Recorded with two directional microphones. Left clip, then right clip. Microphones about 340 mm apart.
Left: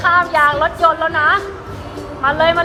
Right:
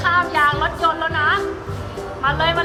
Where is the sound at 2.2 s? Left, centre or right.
Centre.